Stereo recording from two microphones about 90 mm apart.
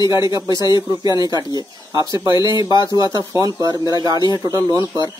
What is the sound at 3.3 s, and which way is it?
Speech, 40° right (ahead or behind).